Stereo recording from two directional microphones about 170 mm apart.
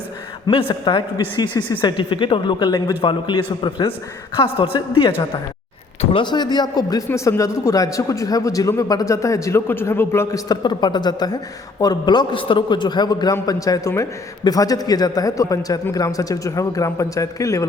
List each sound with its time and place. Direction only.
0.4 s a man's voice: 25° left (ahead or behind)